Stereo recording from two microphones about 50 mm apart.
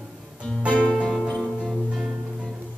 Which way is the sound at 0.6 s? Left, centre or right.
Right.